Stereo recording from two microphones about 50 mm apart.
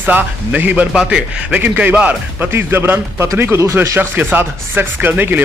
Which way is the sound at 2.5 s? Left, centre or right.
Right.